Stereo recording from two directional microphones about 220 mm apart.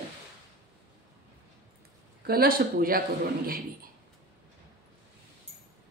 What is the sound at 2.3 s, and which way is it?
Speech, 40° right (ahead or behind).